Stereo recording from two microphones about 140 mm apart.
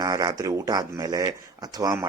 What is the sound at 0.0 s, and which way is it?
Speech, 25° right (ahead or behind).